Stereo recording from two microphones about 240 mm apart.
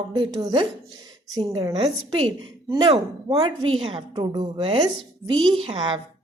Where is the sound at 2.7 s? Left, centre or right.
Centre.